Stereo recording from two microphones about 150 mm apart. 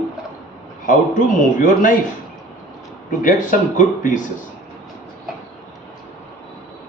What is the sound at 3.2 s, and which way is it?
Speech, 60° left (ahead or behind).